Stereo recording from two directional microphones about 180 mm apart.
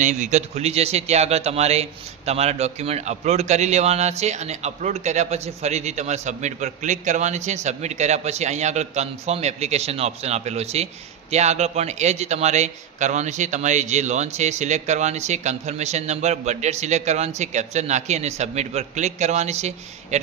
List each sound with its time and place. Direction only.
0.0 s speech: 40° right (ahead or behind)